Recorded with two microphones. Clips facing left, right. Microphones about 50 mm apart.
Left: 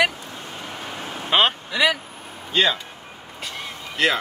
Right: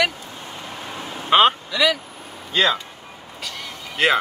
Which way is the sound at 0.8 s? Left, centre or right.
Left.